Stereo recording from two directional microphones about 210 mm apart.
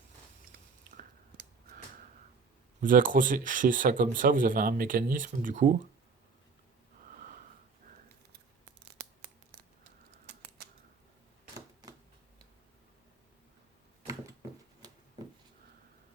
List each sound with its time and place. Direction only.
0.9 s a sound: 45° right (ahead or behind)
2.8 s speech: 40° right (ahead or behind)
7.1 s wheeze: 40° right (ahead or behind)